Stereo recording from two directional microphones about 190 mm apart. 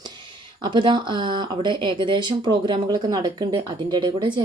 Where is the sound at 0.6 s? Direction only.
25° right (ahead or behind).